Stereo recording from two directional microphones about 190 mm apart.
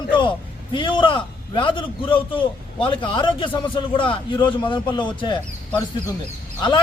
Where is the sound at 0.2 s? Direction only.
25° left (ahead or behind).